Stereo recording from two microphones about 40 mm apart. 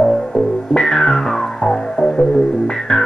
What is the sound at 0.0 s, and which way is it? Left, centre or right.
Music, centre.